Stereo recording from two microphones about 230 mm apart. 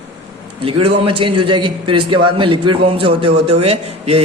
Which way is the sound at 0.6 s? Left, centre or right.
Right.